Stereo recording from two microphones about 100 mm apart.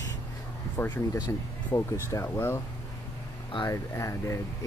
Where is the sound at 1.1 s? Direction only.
30° left (ahead or behind).